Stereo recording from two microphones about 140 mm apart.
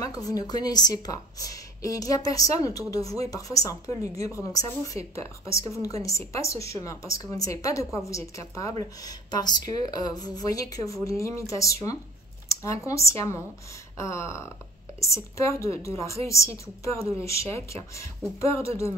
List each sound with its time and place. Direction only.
0.0 s a woman's voice: 25° left (ahead or behind)